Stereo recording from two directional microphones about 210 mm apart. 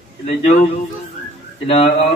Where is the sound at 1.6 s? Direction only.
25° left (ahead or behind).